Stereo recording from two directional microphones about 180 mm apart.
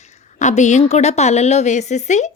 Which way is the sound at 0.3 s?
40° left (ahead or behind).